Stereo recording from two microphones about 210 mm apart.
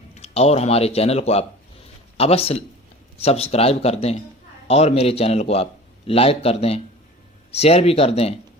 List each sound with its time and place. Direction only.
0.1 s speech: 30° left (ahead or behind)